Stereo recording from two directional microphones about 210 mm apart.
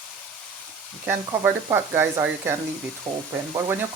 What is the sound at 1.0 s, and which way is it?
Speech, 10° right (ahead or behind).